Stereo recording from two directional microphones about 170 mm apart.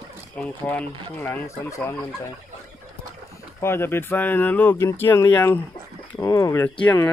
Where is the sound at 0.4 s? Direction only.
10° left (ahead or behind).